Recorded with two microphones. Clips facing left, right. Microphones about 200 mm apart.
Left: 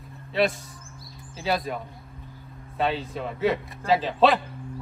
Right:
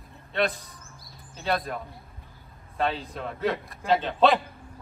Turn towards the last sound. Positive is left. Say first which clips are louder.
# left 1 dB
turn(degrees=0)  # may be behind; listen again after turning